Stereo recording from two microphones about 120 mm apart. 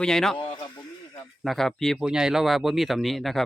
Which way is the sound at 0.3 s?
40° left (ahead or behind).